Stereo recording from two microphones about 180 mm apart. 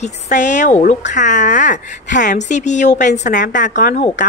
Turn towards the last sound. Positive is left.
turn(degrees=50)  # may be behind; listen again after turning